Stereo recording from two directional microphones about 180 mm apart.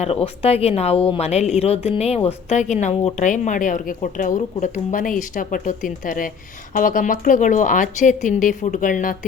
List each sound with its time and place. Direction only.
0.0 s speech: 35° left (ahead or behind)